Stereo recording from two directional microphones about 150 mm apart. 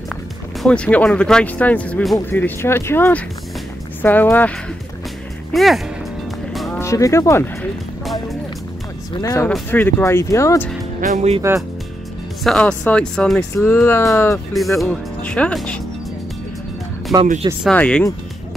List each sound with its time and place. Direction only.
0.1 s speech: 5° left (ahead or behind)
5.5 s speech: centre (ahead or behind)
6.5 s music: centre (ahead or behind)
6.8 s speech: 20° left (ahead or behind)
8.0 s music: centre (ahead or behind)
9.1 s speech: 25° left (ahead or behind)
9.7 s speech: 15° left (ahead or behind)
11.1 s speech: 45° right (ahead or behind)
12.4 s speech: 5° left (ahead or behind)
13.7 s speech: 15° left (ahead or behind)
14.5 s speech: centre (ahead or behind)
17.1 s speech: centre (ahead or behind)